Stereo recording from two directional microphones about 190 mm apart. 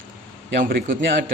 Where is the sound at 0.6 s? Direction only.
45° right (ahead or behind).